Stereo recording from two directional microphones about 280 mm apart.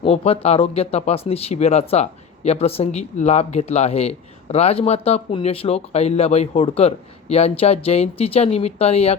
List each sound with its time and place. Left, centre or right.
0.0 s speech: left